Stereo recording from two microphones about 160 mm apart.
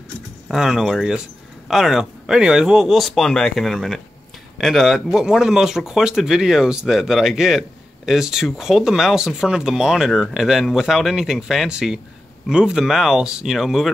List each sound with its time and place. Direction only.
0.5 s speech: centre (ahead or behind)